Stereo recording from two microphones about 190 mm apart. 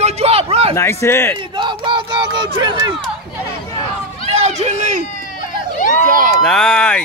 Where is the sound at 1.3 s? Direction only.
25° right (ahead or behind).